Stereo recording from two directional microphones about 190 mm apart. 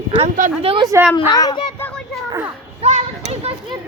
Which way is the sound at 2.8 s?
35° right (ahead or behind).